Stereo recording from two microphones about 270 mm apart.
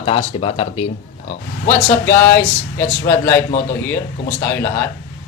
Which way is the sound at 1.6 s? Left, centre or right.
Centre.